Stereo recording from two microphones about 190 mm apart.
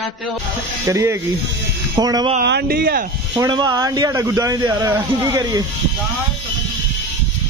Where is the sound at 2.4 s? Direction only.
55° right (ahead or behind).